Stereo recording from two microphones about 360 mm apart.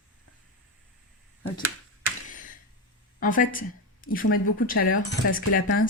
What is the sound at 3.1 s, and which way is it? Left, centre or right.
Speech, left.